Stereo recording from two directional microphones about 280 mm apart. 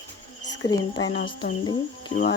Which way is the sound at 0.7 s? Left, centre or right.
Centre.